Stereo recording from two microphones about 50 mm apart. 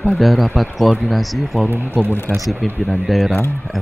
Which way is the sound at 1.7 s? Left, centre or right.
Right.